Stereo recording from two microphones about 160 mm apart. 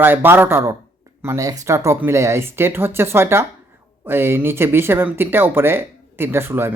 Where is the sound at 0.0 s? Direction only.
15° right (ahead or behind).